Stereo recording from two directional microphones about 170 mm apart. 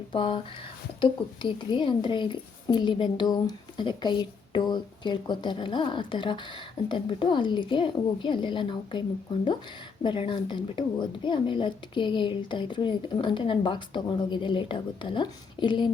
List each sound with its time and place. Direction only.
0.1 s a woman's voice: 30° left (ahead or behind)